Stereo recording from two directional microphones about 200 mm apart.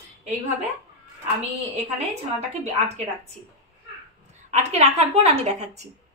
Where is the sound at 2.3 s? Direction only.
35° right (ahead or behind).